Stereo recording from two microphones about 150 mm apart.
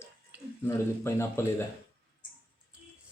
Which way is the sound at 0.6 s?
15° left (ahead or behind).